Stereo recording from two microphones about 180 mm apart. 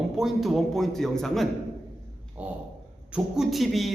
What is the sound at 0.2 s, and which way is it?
A man's voice, centre (ahead or behind).